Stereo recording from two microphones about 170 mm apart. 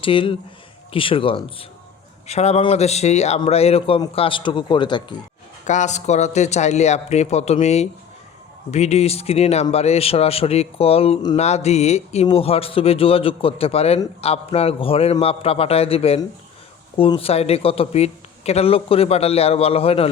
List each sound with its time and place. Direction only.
0.0 s a man's voice: 30° left (ahead or behind)
5.6 s a man's voice: 45° left (ahead or behind)